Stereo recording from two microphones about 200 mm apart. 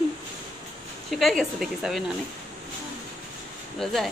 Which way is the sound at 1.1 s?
Centre (ahead or behind).